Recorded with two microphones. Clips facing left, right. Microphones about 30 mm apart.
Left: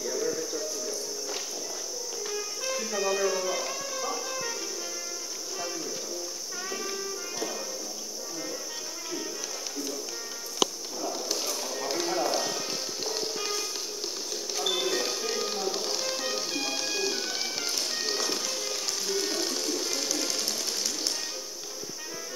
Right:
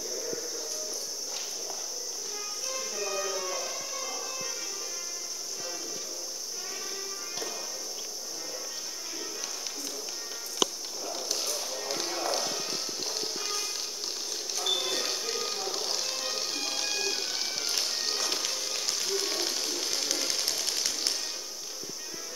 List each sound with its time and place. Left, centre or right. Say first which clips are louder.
0.0 s music: left 6 dB; left
2.9 s music: left 7 dB; left
11.2 s a sound: left 2 dB; centre
11.9 s music: left 4 dB; centre
20.2 s sewing machine: left 1 dB; centre